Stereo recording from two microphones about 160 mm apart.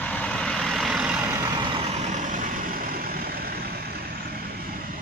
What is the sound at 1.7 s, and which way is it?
Vehicle, 45° right (ahead or behind).